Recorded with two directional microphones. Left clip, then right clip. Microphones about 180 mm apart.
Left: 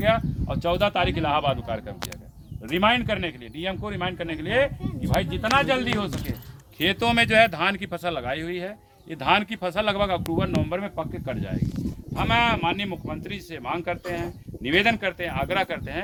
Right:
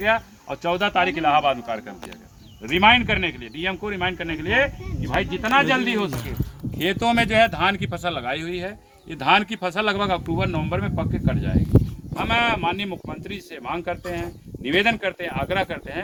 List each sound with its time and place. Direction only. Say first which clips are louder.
0.0 s speech: right 1 dB; 45° left (ahead or behind)
6.7 s speech: right 1 dB; 20° left (ahead or behind)
12.1 s speech: right 1 dB; 20° left (ahead or behind)